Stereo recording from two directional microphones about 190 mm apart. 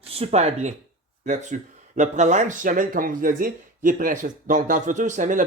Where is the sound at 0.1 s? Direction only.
30° right (ahead or behind).